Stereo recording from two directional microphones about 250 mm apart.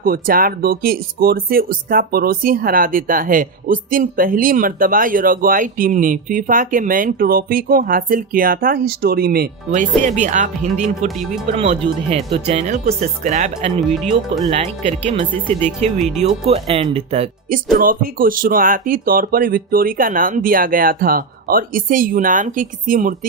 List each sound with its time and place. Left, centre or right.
0.0 s speech: right
13.8 s speech: centre
14.5 s speech: right
16.0 s speech: centre
16.5 s speech: right
17.7 s speech: right